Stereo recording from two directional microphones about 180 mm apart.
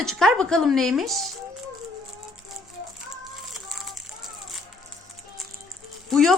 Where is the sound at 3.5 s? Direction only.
Centre (ahead or behind).